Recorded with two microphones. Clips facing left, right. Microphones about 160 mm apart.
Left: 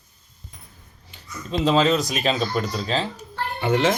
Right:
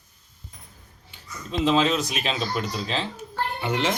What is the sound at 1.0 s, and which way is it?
Speech, 40° left (ahead or behind).